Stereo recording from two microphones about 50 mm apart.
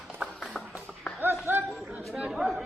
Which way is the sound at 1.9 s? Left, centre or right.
Right.